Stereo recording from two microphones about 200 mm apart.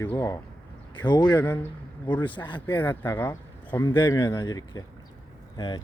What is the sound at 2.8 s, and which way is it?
Speech, 10° left (ahead or behind).